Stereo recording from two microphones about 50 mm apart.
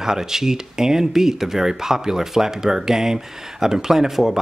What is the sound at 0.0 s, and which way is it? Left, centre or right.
Speech, centre.